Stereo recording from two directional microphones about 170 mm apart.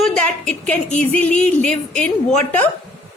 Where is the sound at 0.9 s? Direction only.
5° left (ahead or behind).